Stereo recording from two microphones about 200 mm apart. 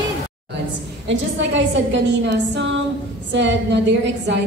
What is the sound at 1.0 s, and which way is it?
A woman's voice, 65° right (ahead or behind).